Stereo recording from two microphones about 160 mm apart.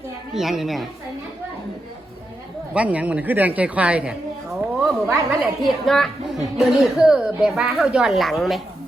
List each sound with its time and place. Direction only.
0.3 s a woman's voice: centre (ahead or behind)
2.7 s a woman's voice: 10° right (ahead or behind)
5.0 s a woman's voice: 15° right (ahead or behind)
5.6 s a woman's voice: centre (ahead or behind)